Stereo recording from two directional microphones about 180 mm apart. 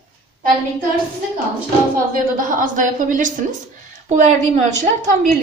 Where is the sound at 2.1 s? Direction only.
50° right (ahead or behind).